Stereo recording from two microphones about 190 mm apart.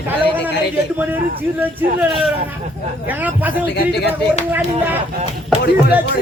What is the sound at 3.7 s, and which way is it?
Speech, 60° left (ahead or behind).